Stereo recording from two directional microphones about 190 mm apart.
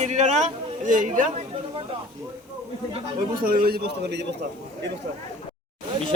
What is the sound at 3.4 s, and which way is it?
Speech, 50° right (ahead or behind).